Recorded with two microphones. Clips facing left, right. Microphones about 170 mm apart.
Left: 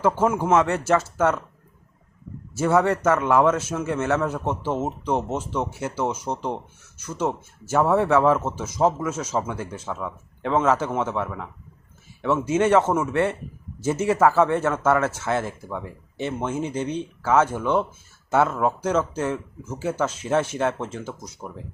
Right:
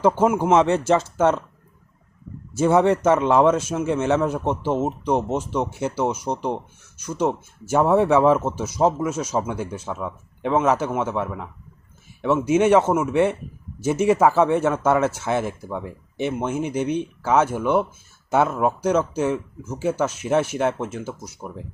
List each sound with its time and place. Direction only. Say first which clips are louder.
0.0 s speech: right 3 dB; 20° right (ahead or behind)
2.6 s speech: right 3 dB; 20° right (ahead or behind)